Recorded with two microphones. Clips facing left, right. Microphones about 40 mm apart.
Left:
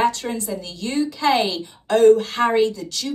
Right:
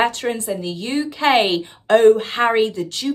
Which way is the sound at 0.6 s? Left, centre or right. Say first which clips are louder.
Right 1 dB; right.